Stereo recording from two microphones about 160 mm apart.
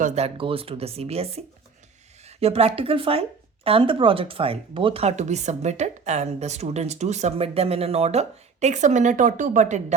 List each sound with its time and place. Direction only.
0.3 s speech: 35° right (ahead or behind)